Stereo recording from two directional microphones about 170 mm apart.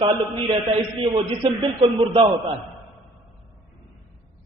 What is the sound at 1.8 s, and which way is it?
Speech, 30° right (ahead or behind).